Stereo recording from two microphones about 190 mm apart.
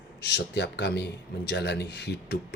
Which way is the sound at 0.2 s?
60° left (ahead or behind).